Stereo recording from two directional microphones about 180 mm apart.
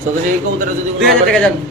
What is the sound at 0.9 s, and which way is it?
Speech, 5° left (ahead or behind).